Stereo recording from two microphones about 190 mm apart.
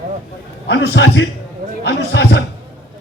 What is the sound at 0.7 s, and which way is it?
A man's voice, 70° left (ahead or behind).